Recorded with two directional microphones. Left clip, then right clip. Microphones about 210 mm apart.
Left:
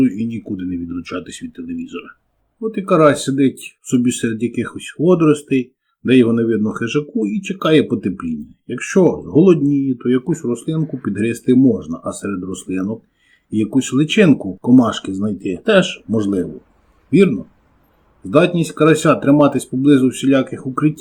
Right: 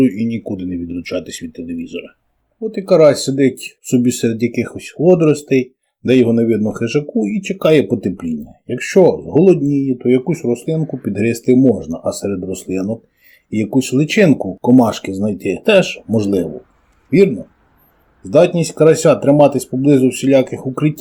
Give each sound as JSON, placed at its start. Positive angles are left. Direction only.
{"t": 0.0, "sound": "speech", "side_deg": -15}
{"t": 10.8, "sound": "speech", "side_deg": 0}
{"t": 11.0, "sound": "speech", "side_deg": -15}
{"t": 18.3, "sound": "speech", "side_deg": -15}